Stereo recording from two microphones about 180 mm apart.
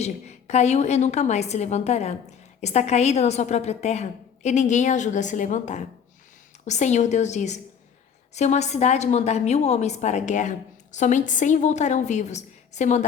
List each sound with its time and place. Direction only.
0.0 s a woman's voice: 40° left (ahead or behind)